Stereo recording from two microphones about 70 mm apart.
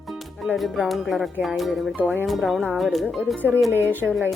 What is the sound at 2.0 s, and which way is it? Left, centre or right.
Speech, right.